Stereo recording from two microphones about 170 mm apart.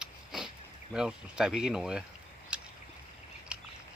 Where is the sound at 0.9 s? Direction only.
5° right (ahead or behind).